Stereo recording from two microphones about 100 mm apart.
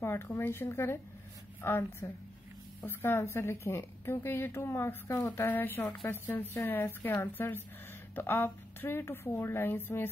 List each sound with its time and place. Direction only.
0.0 s a woman's voice: 25° left (ahead or behind)